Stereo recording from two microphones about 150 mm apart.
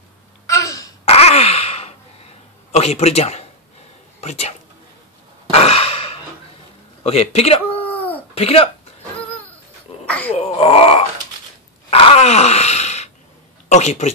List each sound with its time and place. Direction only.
0.5 s throat clearing: 20° left (ahead or behind)
1.0 s a sound: 45° left (ahead or behind)
4.2 s speech: 45° left (ahead or behind)
5.5 s sigh: 40° left (ahead or behind)
7.0 s speech: 45° left (ahead or behind)
10.0 s a sound: 10° left (ahead or behind)
10.3 s wail: 40° left (ahead or behind)
13.7 s speech: 50° left (ahead or behind)